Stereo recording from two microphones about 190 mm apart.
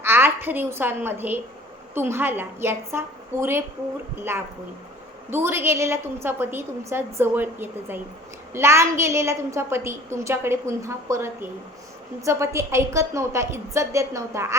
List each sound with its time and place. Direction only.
0.0 s a woman's voice: 10° right (ahead or behind)
5.3 s a woman's voice: 10° right (ahead or behind)